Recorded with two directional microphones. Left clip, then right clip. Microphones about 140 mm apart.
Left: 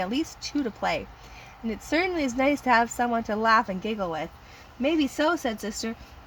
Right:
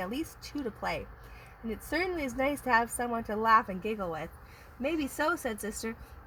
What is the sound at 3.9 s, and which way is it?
Speech, 45° left (ahead or behind).